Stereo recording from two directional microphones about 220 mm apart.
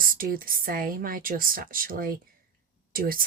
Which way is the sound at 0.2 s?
40° right (ahead or behind).